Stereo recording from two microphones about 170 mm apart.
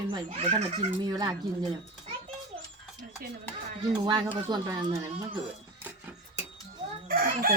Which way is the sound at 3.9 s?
25° right (ahead or behind).